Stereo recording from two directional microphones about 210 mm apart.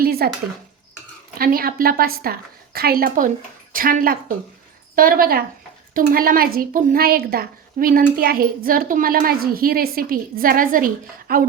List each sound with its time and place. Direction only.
0.0 s dishes: 45° right (ahead or behind)
1.4 s a woman's voice: 45° right (ahead or behind)